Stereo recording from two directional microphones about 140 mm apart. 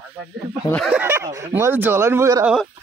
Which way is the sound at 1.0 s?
20° right (ahead or behind).